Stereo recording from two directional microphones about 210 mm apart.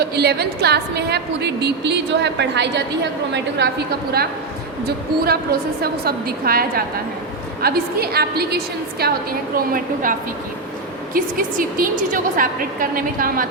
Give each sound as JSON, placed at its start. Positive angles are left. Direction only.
{"t": 0.0, "sound": "a woman's voice", "side_deg": -50}
{"t": 4.9, "sound": "a woman's voice", "side_deg": -50}